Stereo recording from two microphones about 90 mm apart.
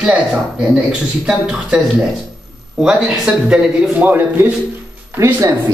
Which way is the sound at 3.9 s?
20° right (ahead or behind).